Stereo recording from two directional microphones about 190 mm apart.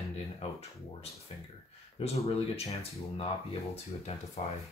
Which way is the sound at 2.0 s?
35° left (ahead or behind).